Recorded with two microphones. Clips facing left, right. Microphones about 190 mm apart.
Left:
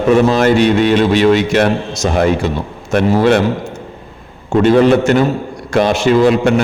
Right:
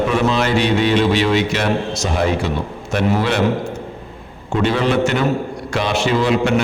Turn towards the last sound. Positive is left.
turn(degrees=45)  # may be behind; listen again after turning